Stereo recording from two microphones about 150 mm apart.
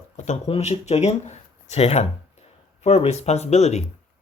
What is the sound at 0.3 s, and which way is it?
Speech, 45° left (ahead or behind).